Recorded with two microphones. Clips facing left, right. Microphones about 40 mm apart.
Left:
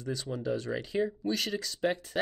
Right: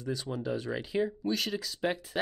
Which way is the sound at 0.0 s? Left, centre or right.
Centre.